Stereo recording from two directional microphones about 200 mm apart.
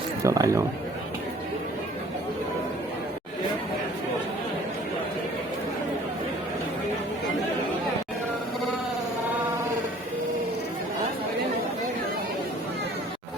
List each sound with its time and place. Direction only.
0.3 s speech: 15° right (ahead or behind)